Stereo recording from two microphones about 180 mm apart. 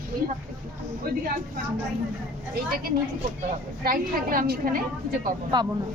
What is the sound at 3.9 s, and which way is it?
A woman's voice, 50° right (ahead or behind).